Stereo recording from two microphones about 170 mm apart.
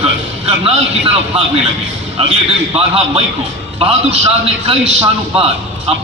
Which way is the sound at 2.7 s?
35° right (ahead or behind).